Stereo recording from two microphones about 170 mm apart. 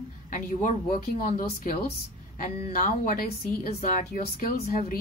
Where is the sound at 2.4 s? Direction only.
50° left (ahead or behind).